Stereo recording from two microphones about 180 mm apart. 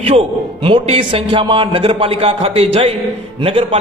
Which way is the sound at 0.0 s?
30° right (ahead or behind).